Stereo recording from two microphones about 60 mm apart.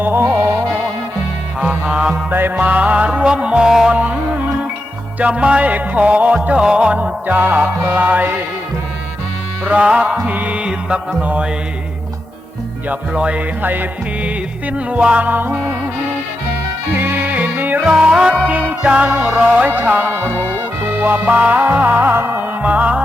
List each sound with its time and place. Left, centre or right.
0.0 s music: right
1.6 s music: centre
2.3 s music: right
2.6 s music: right
3.9 s music: right
9.6 s music: centre
10.2 s music: right
12.9 s music: centre
13.6 s music: right
16.9 s music: right
18.0 s music: centre; by 22.4 s right
22.6 s music: right